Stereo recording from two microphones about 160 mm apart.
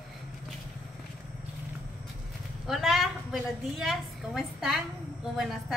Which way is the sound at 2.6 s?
Centre (ahead or behind).